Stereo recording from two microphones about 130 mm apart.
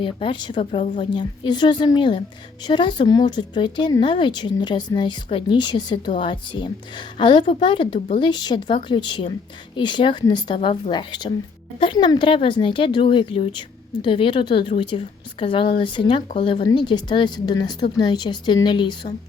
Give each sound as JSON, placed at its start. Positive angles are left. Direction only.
{"t": 0.0, "sound": "speech", "side_deg": 40}